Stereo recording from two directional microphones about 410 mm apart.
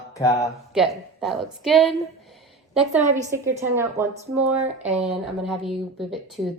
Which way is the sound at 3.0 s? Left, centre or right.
Centre.